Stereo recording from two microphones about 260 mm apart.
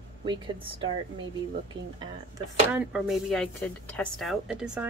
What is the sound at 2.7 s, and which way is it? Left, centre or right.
Speech, centre.